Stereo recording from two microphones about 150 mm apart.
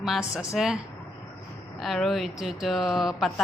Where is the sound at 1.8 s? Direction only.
Centre (ahead or behind).